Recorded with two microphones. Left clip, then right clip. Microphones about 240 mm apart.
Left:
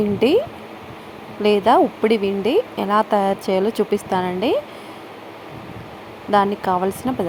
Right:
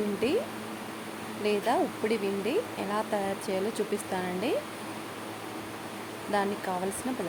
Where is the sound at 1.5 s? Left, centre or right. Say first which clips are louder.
Left 13 dB; left.